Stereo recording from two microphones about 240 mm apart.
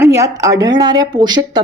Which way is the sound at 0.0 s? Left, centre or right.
Centre.